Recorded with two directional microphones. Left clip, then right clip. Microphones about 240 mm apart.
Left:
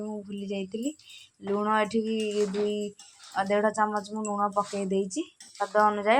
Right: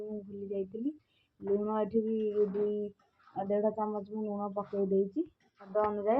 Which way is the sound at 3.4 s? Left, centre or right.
Centre.